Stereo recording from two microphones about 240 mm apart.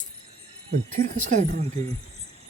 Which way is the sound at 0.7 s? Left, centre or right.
Right.